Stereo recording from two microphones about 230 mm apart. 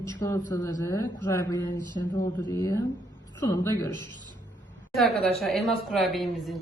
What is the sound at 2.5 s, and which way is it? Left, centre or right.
A woman's voice, centre.